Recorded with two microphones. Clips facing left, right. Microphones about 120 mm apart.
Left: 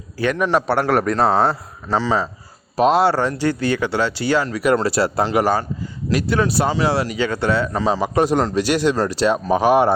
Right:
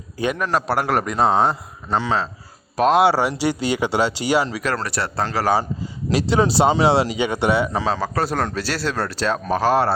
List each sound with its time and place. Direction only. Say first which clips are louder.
0.3 s a man's voice: left 5 dB; 5° left (ahead or behind)
1.3 s speech: right 1 dB; 15° right (ahead or behind)
2.0 s a man's voice: left 2 dB; 10° left (ahead or behind)
3.4 s speech: left 1 dB; 15° right (ahead or behind)
4.7 s speech: left 7 dB; 25° left (ahead or behind)
6.1 s a man's voice: right 1 dB; 25° right (ahead or behind)
7.9 s speech: left 5 dB; 15° left (ahead or behind)